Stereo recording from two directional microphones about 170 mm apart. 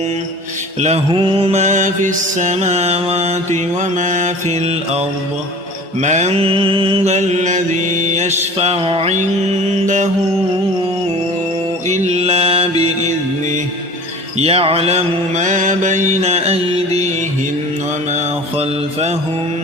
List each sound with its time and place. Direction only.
0.8 s mantra: 40° right (ahead or behind)
11.9 s mantra: 40° right (ahead or behind)
14.3 s mantra: 35° right (ahead or behind)
18.1 s mantra: 40° right (ahead or behind)